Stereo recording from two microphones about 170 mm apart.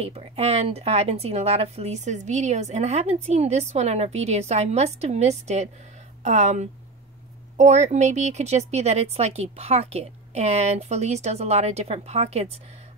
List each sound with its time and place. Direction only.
0.0 s a woman's voice: 35° right (ahead or behind)